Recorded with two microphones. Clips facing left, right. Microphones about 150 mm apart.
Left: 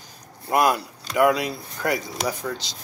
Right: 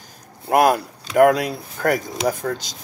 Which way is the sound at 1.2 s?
50° right (ahead or behind).